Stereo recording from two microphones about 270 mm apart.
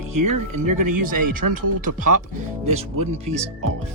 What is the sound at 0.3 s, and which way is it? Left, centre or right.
Speech, right.